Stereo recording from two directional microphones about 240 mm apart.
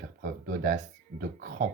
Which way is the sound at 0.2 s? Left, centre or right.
Right.